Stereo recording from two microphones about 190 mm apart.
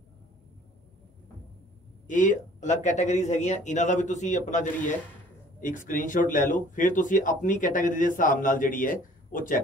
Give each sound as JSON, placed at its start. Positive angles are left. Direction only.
{"t": 2.0, "sound": "speech", "side_deg": 40}